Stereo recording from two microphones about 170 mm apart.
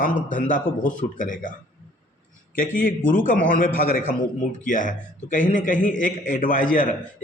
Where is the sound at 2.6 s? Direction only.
55° left (ahead or behind).